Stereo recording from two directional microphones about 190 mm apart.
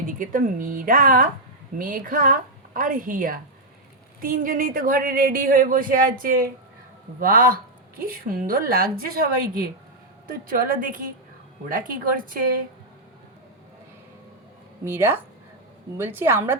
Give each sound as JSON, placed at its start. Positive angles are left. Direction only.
{"t": 0.1, "sound": "a woman's voice", "side_deg": -45}
{"t": 14.8, "sound": "a woman's voice", "side_deg": -10}